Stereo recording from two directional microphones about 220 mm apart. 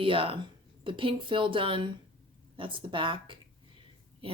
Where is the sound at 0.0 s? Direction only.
25° right (ahead or behind).